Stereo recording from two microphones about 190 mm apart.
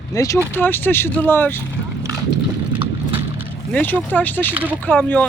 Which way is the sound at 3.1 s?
10° right (ahead or behind).